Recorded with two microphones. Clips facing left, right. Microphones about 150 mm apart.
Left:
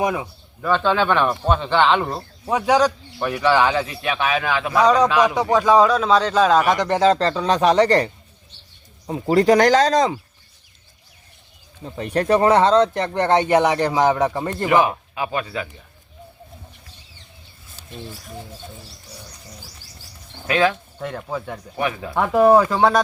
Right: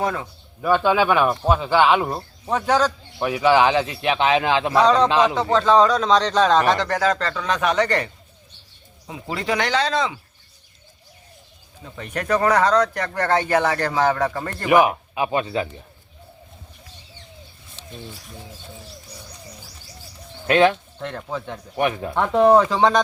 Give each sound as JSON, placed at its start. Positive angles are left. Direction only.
{"t": 0.0, "sound": "speech", "side_deg": 15}
{"t": 0.6, "sound": "speech", "side_deg": -10}
{"t": 2.5, "sound": "speech", "side_deg": 10}
{"t": 3.2, "sound": "speech", "side_deg": -15}
{"t": 4.8, "sound": "speech", "side_deg": 10}
{"t": 11.8, "sound": "speech", "side_deg": 35}
{"t": 14.7, "sound": "speech", "side_deg": -20}
{"t": 20.5, "sound": "speech", "side_deg": -25}
{"t": 21.0, "sound": "speech", "side_deg": 10}